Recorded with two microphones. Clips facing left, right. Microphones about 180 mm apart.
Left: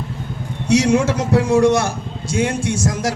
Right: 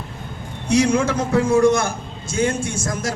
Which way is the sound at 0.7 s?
75° left (ahead or behind).